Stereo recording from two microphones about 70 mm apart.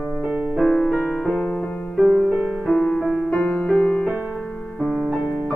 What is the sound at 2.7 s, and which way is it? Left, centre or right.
Music, centre.